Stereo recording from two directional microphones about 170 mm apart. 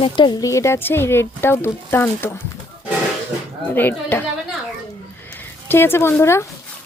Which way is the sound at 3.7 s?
10° left (ahead or behind).